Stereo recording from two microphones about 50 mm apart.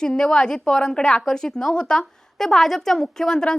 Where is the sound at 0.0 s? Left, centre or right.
Centre.